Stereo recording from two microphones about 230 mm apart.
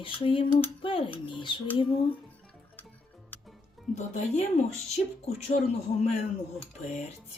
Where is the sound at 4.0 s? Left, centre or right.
Left.